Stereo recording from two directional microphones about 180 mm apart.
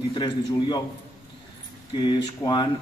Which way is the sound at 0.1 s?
25° left (ahead or behind).